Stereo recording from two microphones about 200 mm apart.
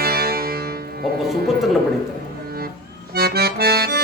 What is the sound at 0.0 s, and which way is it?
Music, 50° right (ahead or behind).